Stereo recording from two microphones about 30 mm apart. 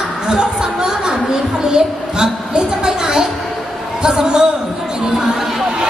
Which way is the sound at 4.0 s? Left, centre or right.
Right.